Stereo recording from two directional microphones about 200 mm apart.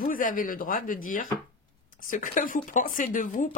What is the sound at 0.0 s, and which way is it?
Speech, 45° left (ahead or behind).